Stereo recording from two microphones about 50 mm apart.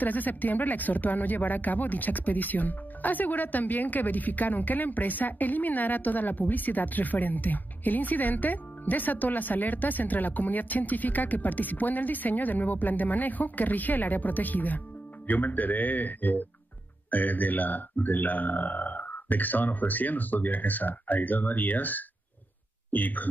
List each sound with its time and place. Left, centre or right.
0.0 s speech: left